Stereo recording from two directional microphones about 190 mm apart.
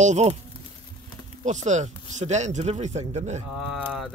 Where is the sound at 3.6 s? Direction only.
Centre (ahead or behind).